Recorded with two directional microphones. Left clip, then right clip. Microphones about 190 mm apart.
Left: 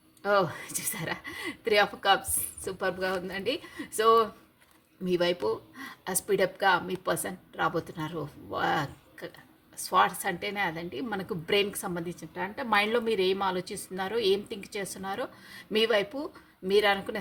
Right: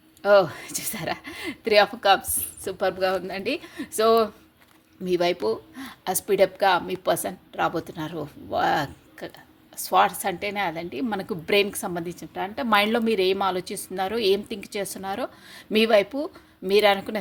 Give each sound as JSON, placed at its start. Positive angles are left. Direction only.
{"t": 0.2, "sound": "a woman's voice", "side_deg": -35}